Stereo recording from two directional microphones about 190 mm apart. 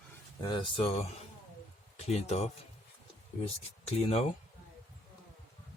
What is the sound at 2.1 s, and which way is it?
Speech, 35° left (ahead or behind).